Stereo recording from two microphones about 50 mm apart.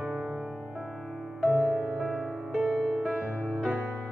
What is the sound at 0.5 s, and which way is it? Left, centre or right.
Music, right.